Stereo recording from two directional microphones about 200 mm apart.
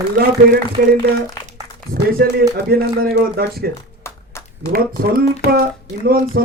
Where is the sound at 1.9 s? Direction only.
50° right (ahead or behind).